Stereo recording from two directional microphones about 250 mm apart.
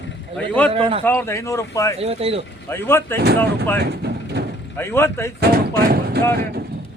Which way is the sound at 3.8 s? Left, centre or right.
Right.